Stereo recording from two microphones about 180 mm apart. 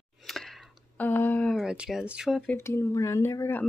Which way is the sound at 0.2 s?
Centre (ahead or behind).